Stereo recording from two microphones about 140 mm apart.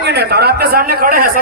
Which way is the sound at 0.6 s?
90° right.